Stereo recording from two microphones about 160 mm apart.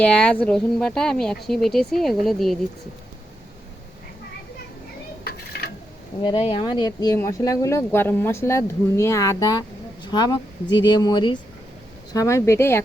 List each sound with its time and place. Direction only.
0.0 s speech: 5° left (ahead or behind)
6.2 s speech: 30° left (ahead or behind)
12.1 s a woman's voice: 15° left (ahead or behind)